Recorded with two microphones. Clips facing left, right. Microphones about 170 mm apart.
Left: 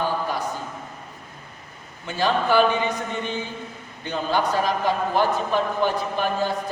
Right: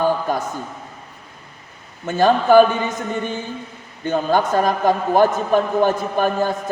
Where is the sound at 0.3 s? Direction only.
45° right (ahead or behind).